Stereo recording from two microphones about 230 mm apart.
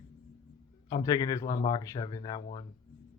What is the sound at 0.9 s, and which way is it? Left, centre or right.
Speech, centre.